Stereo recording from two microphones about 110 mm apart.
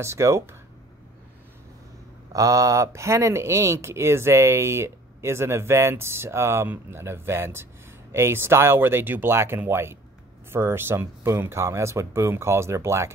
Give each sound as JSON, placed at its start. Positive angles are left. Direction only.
{"t": 0.0, "sound": "speech", "side_deg": -25}
{"t": 2.3, "sound": "speech", "side_deg": -30}